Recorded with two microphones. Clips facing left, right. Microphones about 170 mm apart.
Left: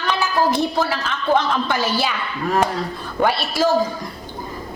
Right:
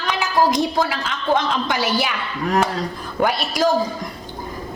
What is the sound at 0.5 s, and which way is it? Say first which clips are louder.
A woman's voice: even; 15° right (ahead or behind).